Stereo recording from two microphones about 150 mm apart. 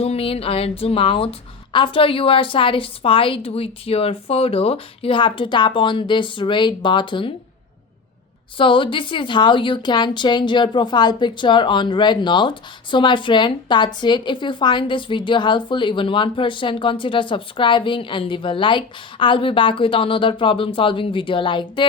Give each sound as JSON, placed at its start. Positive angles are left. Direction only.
{"t": 0.0, "sound": "a woman's voice", "side_deg": 40}
{"t": 8.5, "sound": "a woman's voice", "side_deg": 35}